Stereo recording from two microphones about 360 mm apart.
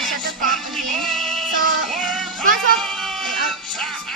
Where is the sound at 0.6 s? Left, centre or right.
Centre.